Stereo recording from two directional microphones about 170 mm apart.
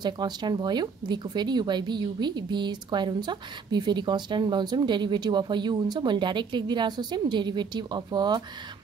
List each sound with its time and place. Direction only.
0.0 s a woman's voice: 25° right (ahead or behind)